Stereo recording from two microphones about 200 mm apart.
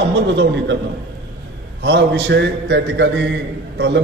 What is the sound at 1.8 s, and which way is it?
A man's voice, 60° right (ahead or behind).